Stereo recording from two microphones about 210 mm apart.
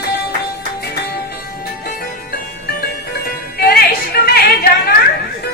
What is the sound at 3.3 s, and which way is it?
Music, 50° left (ahead or behind).